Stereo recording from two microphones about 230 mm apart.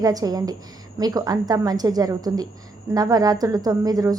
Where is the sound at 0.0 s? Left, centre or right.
Centre.